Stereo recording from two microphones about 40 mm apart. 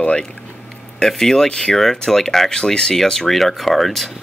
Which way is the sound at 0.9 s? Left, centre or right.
Centre.